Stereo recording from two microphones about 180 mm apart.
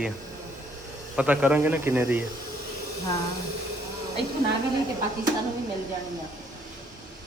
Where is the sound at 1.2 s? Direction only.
10° right (ahead or behind).